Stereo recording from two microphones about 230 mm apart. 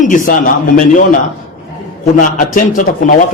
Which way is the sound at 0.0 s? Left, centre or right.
Left.